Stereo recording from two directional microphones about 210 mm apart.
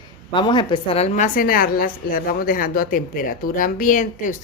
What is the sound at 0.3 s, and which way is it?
A woman's voice, 20° left (ahead or behind).